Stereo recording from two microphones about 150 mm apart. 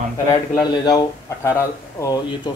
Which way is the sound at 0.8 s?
20° left (ahead or behind).